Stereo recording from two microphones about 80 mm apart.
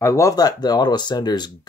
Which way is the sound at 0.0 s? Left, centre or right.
Left.